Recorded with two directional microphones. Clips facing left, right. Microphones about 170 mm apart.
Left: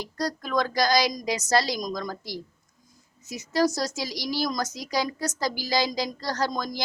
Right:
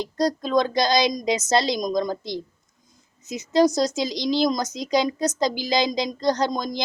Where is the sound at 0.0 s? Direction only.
20° right (ahead or behind).